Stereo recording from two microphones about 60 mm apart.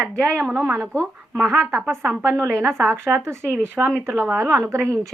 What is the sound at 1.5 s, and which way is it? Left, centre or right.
A woman's voice, right.